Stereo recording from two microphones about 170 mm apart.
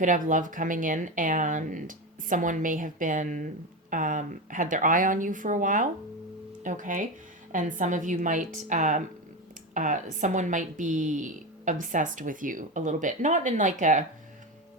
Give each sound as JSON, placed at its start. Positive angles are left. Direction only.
{"t": 0.0, "sound": "speech", "side_deg": -50}